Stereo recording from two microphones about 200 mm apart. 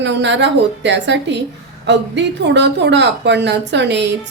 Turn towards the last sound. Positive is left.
turn(degrees=-60)  # may be behind; listen again after turning